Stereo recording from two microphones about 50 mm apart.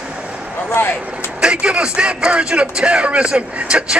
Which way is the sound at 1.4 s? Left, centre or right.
Centre.